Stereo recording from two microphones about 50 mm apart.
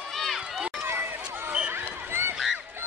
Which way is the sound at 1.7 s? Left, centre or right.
Right.